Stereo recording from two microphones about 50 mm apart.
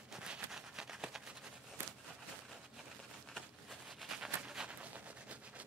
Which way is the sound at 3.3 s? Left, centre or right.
Centre.